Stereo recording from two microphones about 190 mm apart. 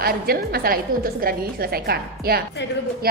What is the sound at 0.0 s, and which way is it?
A woman's voice, 55° right (ahead or behind).